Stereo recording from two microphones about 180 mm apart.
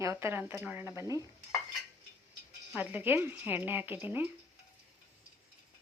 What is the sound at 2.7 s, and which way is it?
Speech, 10° right (ahead or behind).